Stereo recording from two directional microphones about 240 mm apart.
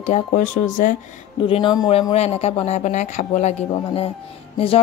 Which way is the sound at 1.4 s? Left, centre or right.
Left.